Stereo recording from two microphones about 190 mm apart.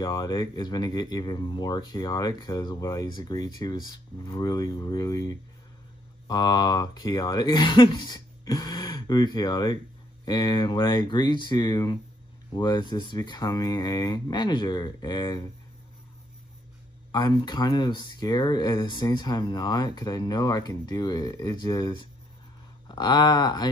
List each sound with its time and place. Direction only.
0.0 s speech: 20° left (ahead or behind)
17.1 s speech: 20° left (ahead or behind)